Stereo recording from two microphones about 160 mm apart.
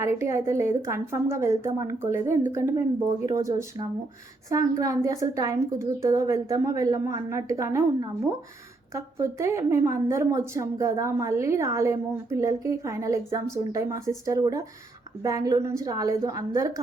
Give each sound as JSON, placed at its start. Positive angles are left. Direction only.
{"t": 0.0, "sound": "a woman's voice", "side_deg": -20}